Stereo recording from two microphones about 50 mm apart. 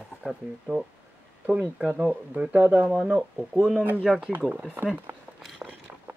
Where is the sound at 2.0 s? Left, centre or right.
Right.